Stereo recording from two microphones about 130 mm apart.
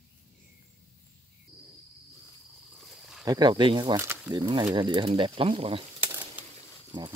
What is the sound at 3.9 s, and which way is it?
Speech, 15° right (ahead or behind).